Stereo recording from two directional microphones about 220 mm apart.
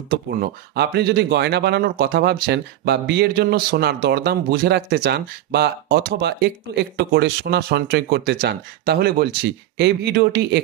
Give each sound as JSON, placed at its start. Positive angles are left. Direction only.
{"t": 0.1, "sound": "speech", "side_deg": -50}